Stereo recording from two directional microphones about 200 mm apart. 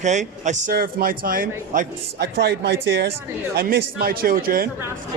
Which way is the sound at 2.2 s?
55° right (ahead or behind).